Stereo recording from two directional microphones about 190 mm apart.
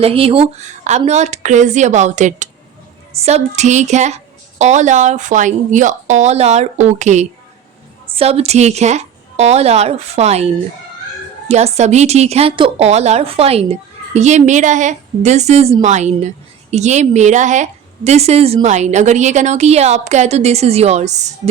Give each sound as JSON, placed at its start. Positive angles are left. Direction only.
{"t": 0.0, "sound": "a woman's voice", "side_deg": -30}